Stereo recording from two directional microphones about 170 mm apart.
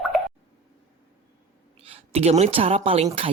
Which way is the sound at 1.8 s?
35° right (ahead or behind).